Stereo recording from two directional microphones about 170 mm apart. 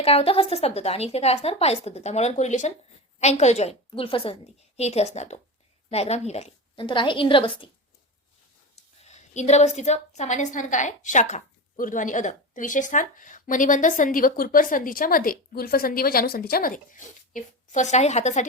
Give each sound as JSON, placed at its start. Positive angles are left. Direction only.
{"t": 0.0, "sound": "a woman's voice", "side_deg": 35}
{"t": 8.7, "sound": "a woman's voice", "side_deg": 40}